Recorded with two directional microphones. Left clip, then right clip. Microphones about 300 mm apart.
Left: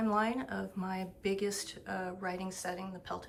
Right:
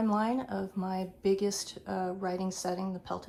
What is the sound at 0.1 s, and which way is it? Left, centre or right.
Speech, centre.